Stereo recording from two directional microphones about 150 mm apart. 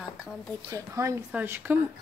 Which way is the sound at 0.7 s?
20° right (ahead or behind).